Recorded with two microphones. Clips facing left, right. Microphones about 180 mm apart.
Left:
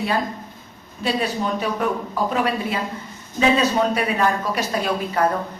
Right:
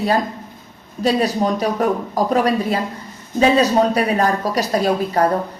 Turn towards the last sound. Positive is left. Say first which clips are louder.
# right 5 dB
turn(degrees=-40)  # may be behind; listen again after turning